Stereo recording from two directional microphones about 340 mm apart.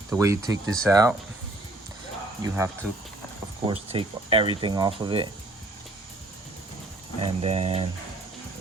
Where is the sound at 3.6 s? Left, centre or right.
Centre.